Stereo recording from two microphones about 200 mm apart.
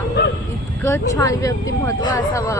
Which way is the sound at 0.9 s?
15° left (ahead or behind).